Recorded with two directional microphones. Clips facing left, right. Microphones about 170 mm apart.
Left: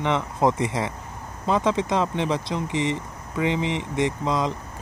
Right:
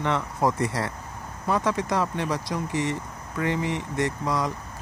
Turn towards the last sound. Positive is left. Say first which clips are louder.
# left 2 dB
turn(degrees=20)  # may be behind; listen again after turning